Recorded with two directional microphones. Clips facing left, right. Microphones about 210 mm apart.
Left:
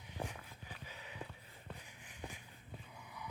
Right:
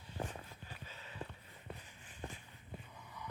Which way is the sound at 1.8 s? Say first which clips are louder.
Left 1 dB; 15° left (ahead or behind).